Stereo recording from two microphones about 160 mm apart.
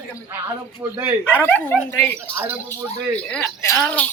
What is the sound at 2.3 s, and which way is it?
Speech, 10° right (ahead or behind).